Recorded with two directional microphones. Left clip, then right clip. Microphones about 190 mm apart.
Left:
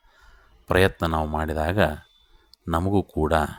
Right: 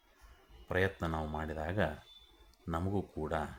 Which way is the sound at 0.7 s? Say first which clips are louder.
Left 13 dB; 40° left (ahead or behind).